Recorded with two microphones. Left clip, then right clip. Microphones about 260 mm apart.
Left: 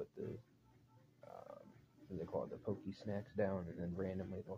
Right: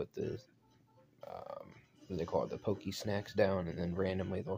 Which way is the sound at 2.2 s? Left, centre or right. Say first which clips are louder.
Right 8 dB; right.